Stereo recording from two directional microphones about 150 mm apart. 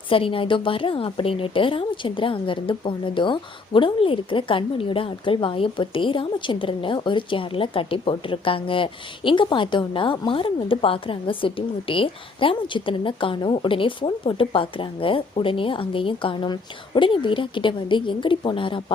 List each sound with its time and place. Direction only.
0.1 s a woman's voice: 35° left (ahead or behind)